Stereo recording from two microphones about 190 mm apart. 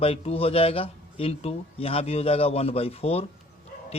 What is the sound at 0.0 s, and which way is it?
Speech, 30° left (ahead or behind).